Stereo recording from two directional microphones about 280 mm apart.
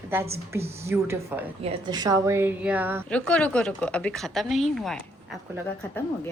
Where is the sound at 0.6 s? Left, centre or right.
Right.